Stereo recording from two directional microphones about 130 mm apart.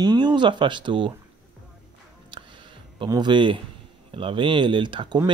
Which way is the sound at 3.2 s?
35° right (ahead or behind).